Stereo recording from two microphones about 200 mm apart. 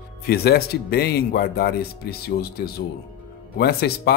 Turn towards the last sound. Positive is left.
turn(degrees=55)  # may be behind; listen again after turning